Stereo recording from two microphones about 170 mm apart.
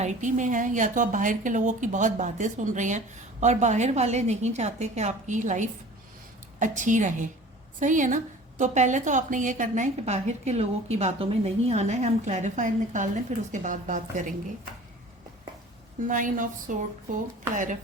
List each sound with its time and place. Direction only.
0.0 s a woman's voice: 45° right (ahead or behind)
16.0 s a woman's voice: 50° right (ahead or behind)